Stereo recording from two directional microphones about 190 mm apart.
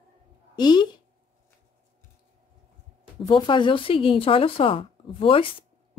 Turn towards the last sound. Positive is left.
turn(degrees=30)  # may be behind; listen again after turning